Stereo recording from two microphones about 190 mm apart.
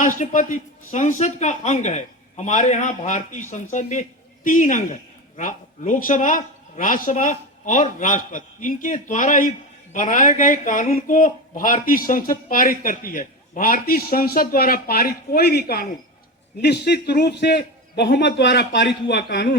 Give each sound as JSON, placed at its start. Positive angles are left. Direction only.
{"t": 0.0, "sound": "a man's voice", "side_deg": 45}